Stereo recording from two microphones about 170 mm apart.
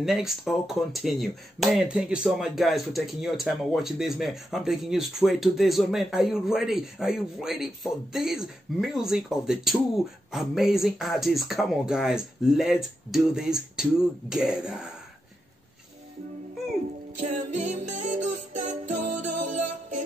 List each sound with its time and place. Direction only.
0.0 s speech: centre (ahead or behind)
17.2 s music: 45° right (ahead or behind)